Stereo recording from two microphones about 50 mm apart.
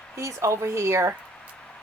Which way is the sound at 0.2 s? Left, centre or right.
Right.